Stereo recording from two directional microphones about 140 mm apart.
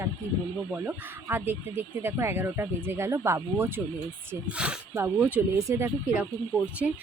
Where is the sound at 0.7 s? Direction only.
15° right (ahead or behind).